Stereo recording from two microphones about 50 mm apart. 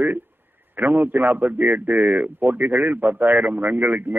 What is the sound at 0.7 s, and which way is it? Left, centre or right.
A man's voice, right.